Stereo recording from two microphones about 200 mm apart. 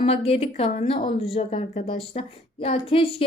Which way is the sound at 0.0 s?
30° left (ahead or behind).